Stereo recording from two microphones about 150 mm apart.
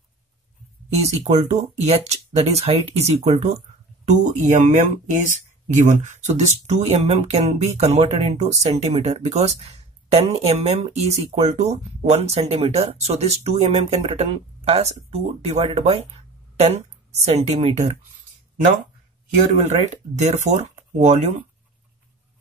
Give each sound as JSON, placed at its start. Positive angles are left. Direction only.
{"t": 1.2, "sound": "speech", "side_deg": -50}
{"t": 4.1, "sound": "speech", "side_deg": -55}
{"t": 19.5, "sound": "speech", "side_deg": -50}